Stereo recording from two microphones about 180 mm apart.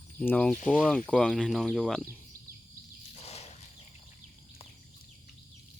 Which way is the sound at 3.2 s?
35° left (ahead or behind).